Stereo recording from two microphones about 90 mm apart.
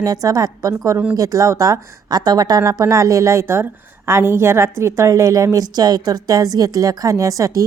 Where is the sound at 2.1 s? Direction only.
50° right (ahead or behind).